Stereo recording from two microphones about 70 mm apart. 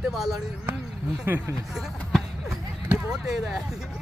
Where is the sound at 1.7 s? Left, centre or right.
Centre.